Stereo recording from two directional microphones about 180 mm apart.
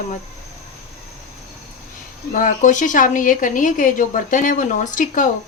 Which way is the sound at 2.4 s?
45° left (ahead or behind).